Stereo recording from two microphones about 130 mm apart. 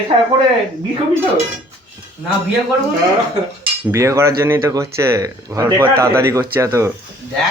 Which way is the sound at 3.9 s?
20° right (ahead or behind).